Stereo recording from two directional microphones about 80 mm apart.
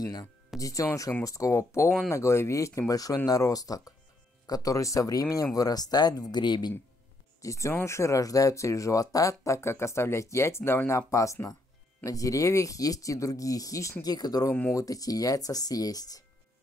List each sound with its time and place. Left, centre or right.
0.0 s speech: left
6.4 s speech: left
7.4 s speech: left